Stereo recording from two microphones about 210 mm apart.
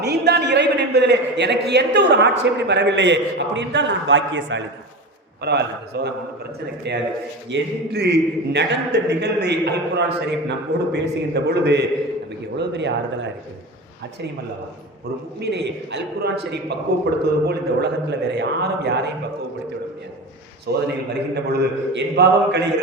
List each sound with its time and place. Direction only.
0.0 s a man's voice: 50° right (ahead or behind)
15.4 s a man's voice: 55° right (ahead or behind)
20.7 s a man's voice: 50° right (ahead or behind)